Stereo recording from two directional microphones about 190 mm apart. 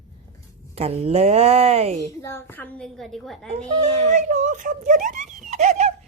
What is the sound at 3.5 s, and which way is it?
A child's voice, 35° right (ahead or behind).